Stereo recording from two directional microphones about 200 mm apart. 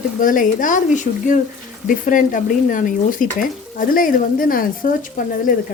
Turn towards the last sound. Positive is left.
turn(degrees=45)  # may be behind; listen again after turning